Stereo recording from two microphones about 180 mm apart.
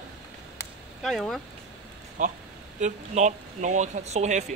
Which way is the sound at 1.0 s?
Centre (ahead or behind).